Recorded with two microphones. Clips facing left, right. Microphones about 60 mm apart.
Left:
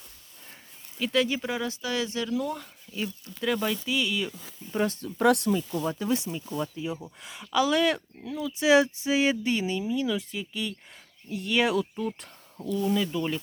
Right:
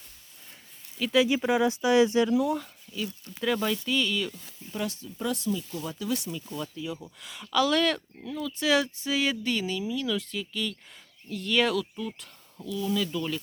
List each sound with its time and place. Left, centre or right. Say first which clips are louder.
0.9 s speech: right 2 dB; centre
1.4 s speech: right 6 dB; centre
2.4 s speech: right 4 dB; centre
2.9 s speech: left 1 dB; left
3.4 s speech: even; centre
4.7 s speech: left 5 dB; left
4.9 s speech: left 9 dB; left
7.4 s speech: left 1 dB; centre
11.8 s speech: left 3 dB; left
12.9 s speech: right 1 dB; left